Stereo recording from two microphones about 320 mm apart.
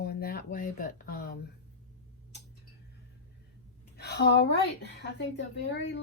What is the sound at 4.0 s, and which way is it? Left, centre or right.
Speech, left.